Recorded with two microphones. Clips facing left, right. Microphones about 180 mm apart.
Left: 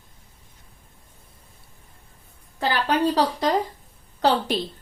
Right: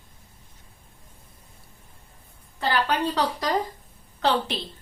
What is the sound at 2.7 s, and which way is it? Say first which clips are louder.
Speech: left 2 dB; 30° left (ahead or behind).